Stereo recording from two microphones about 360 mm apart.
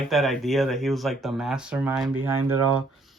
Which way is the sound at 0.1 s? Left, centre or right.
Centre.